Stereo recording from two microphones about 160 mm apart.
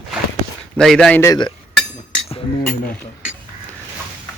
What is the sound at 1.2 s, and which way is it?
Speech, 25° left (ahead or behind).